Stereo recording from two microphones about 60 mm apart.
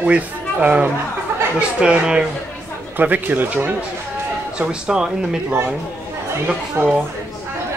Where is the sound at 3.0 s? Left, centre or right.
Right.